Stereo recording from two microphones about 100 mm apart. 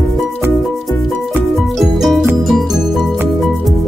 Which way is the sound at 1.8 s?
Centre (ahead or behind).